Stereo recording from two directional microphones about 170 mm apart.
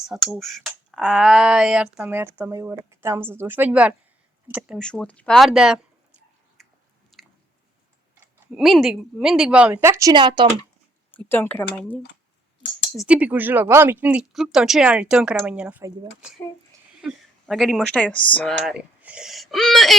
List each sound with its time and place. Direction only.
0.0 s speech: centre (ahead or behind)
4.8 s a sound: 5° left (ahead or behind)
7.1 s squish: centre (ahead or behind)
8.5 s speech: centre (ahead or behind); by 10.4 s 25° right (ahead or behind)
11.1 s speech: 10° left (ahead or behind)
13.0 s speech: 10° right (ahead or behind)
17.0 s speech: centre (ahead or behind)